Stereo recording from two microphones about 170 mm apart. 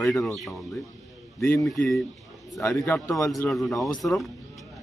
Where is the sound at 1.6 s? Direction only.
Centre (ahead or behind).